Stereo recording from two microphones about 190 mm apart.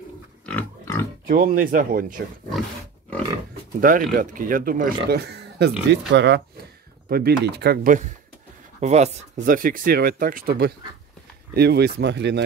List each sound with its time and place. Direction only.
0.5 s pig: 10° left (ahead or behind)
1.2 s speech: 45° right (ahead or behind)
3.8 s speech: 45° right (ahead or behind)
5.1 s speech: 60° right (ahead or behind)
7.1 s speech: 55° right (ahead or behind)